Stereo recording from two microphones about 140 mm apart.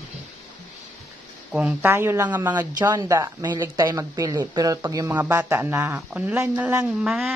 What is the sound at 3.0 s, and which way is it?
A man's voice, 25° right (ahead or behind).